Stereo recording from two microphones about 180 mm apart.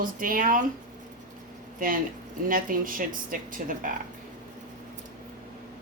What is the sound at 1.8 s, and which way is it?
Speech, 50° right (ahead or behind).